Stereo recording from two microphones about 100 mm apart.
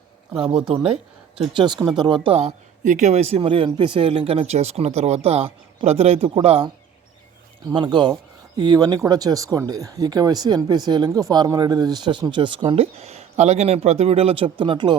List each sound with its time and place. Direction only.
0.3 s speech: 65° right (ahead or behind)
1.5 s speech: 45° right (ahead or behind); by 2.6 s 65° right (ahead or behind)
3.1 s a man's voice: 90° right
7.7 s speech: 50° right (ahead or behind); by 14.5 s 70° right (ahead or behind)
14.6 s speech: 50° right (ahead or behind)